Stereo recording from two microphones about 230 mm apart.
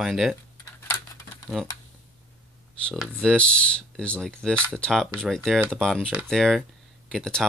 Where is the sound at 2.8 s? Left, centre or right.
Centre.